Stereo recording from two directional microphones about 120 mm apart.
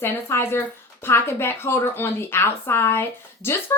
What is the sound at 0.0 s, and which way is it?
Speech, 20° left (ahead or behind).